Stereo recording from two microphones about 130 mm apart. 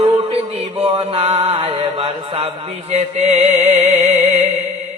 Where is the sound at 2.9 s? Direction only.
55° right (ahead or behind).